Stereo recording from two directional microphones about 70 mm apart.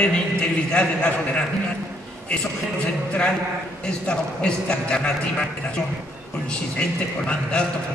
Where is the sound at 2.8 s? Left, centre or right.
Centre.